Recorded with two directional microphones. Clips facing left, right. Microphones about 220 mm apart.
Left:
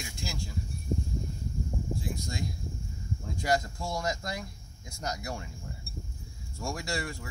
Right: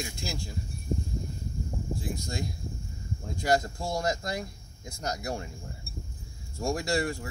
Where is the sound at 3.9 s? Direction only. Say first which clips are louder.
Right 3 dB; 30° right (ahead or behind).